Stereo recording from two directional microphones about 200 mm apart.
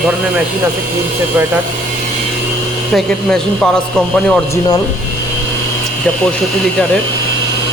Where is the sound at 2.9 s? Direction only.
5° left (ahead or behind).